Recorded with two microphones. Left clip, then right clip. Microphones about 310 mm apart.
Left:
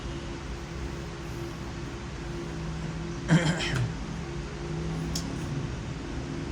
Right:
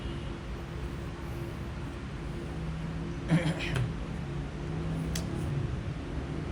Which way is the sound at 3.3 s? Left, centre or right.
Left.